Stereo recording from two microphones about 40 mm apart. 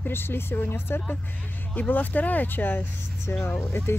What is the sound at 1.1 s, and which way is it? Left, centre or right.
Speech, left.